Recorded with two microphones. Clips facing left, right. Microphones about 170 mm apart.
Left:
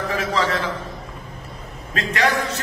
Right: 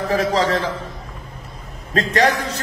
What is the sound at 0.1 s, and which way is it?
Speech, 35° right (ahead or behind).